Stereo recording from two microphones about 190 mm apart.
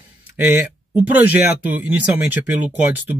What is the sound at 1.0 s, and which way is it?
Speech, 10° right (ahead or behind).